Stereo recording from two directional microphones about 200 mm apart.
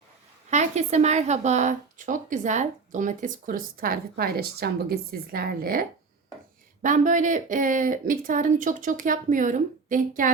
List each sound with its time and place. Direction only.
0.5 s speech: 35° right (ahead or behind)
6.8 s speech: 40° right (ahead or behind)